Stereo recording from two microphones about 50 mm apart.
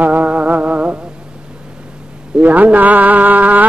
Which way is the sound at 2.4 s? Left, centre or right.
Right.